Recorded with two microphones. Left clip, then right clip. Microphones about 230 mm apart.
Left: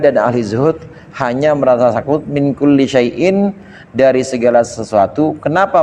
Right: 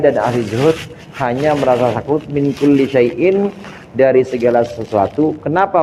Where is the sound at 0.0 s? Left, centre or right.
Left.